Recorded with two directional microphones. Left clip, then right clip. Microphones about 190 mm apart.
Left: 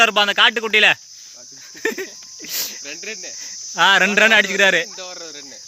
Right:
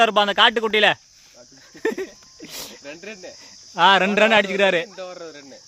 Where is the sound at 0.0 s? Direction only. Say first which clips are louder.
Left 2 dB; 20° right (ahead or behind).